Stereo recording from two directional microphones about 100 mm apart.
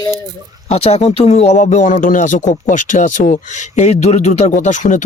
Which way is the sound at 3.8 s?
90° left.